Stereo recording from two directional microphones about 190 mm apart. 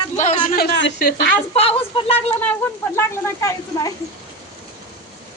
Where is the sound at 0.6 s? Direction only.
60° left (ahead or behind).